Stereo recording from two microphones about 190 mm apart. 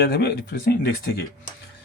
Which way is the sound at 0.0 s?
55° left (ahead or behind).